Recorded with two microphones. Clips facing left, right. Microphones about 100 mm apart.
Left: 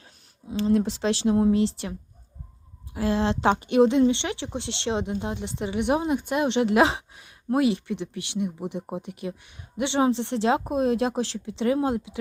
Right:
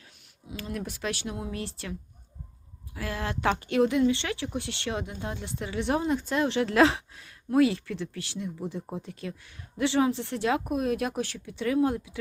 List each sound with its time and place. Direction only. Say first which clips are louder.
0.0 s a woman's voice: left 5 dB; 30° left (ahead or behind)